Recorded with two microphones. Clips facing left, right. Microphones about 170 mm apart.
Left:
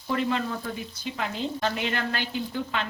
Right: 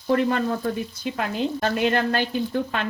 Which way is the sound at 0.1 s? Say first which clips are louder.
Right 6 dB; 50° right (ahead or behind).